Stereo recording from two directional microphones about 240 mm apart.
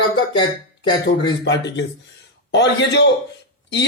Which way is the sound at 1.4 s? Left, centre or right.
Left.